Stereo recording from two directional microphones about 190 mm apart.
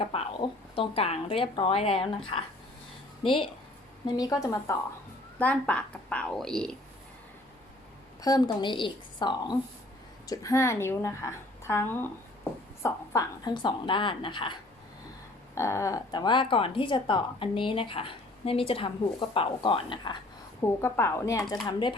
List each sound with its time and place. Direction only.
0.0 s a woman's voice: 30° left (ahead or behind); by 6.7 s 5° left (ahead or behind)
8.2 s a woman's voice: 20° left (ahead or behind)
15.5 s a woman's voice: 15° left (ahead or behind)
20.6 s speech: 15° left (ahead or behind)